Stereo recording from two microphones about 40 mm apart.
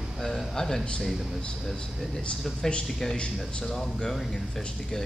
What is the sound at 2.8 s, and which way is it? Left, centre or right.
Speech, centre.